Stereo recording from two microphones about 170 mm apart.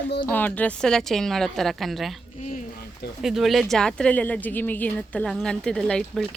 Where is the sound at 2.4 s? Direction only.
45° left (ahead or behind).